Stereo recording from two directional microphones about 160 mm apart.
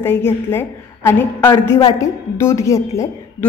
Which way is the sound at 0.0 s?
15° left (ahead or behind).